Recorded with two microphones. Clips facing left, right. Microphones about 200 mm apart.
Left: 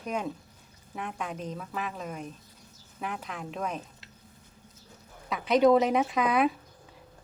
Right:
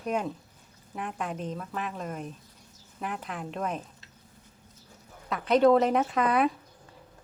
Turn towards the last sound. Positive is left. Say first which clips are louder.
# even
turn(degrees=5)  # may be behind; listen again after turning